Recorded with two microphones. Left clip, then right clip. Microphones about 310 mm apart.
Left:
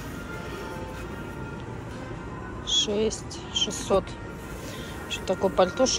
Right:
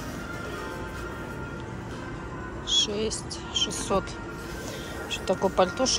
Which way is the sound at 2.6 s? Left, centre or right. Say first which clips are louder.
Left 1 dB; centre.